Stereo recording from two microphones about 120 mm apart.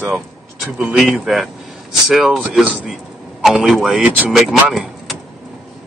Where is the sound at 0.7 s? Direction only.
10° right (ahead or behind).